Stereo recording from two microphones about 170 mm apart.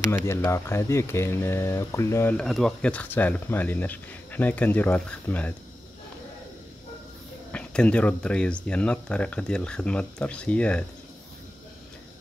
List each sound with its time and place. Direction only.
0.1 s speech: 15° left (ahead or behind)
2.3 s speech: centre (ahead or behind)
7.5 s speech: 5° left (ahead or behind)